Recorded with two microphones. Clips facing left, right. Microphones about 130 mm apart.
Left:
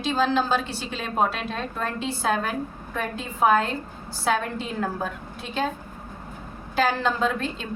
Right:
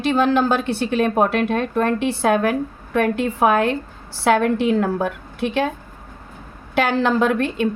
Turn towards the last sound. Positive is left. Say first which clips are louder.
# right 7 dB
turn(degrees=-65)  # may be behind; listen again after turning